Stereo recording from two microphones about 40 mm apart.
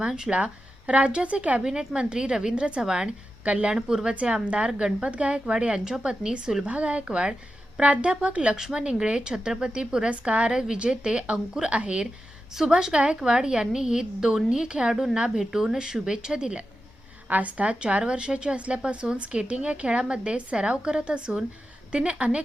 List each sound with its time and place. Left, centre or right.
0.3 s a woman's voice: right
1.6 s a woman's voice: centre
3.4 s a woman's voice: right
3.8 s a woman's voice: centre
4.1 s a woman's voice: right
5.0 s a woman's voice: right
12.5 s a woman's voice: centre
12.9 s a woman's voice: right
17.2 s a woman's voice: right
17.7 s a woman's voice: right